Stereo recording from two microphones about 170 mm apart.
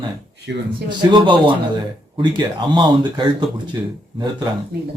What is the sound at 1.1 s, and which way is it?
Speech, 25° right (ahead or behind).